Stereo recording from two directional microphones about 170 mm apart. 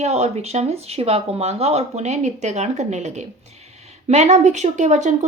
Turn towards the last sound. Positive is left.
turn(degrees=-45)  # may be behind; listen again after turning